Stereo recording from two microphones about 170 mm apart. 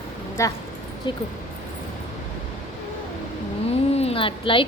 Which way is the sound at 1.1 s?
25° left (ahead or behind).